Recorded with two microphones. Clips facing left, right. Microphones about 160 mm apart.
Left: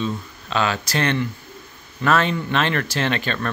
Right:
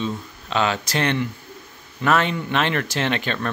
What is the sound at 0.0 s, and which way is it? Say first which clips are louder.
Speech: left 1 dB; 20° right (ahead or behind).